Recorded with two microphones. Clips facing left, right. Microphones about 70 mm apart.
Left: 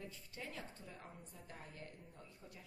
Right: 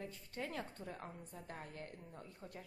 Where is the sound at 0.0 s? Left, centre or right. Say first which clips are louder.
Right 5 dB; right.